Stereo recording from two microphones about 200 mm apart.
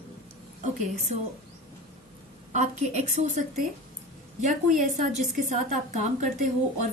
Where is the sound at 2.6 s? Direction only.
35° right (ahead or behind).